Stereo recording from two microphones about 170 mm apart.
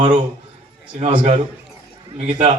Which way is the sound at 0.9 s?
40° right (ahead or behind).